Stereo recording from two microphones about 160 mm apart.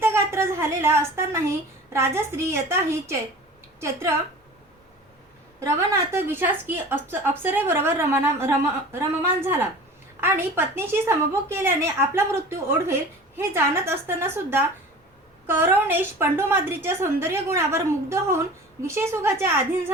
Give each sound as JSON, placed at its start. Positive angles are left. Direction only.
{"t": 0.0, "sound": "a sound", "side_deg": -15}
{"t": 3.8, "sound": "a woman's voice", "side_deg": -15}
{"t": 5.5, "sound": "a woman's voice", "side_deg": -15}